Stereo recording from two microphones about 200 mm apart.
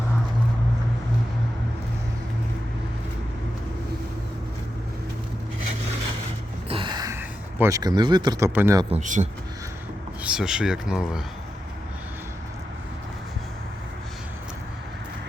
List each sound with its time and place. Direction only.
6.7 s a sound: 25° right (ahead or behind)
8.9 s a man's voice: 40° right (ahead or behind)
10.2 s speech: 5° right (ahead or behind)